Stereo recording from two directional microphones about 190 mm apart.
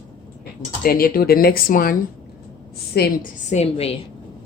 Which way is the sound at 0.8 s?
50° left (ahead or behind).